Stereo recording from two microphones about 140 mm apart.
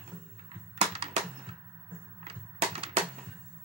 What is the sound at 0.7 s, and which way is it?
Music, 45° right (ahead or behind).